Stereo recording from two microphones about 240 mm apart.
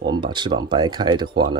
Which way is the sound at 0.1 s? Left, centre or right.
Centre.